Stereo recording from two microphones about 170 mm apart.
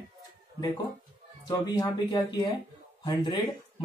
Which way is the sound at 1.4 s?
25° left (ahead or behind).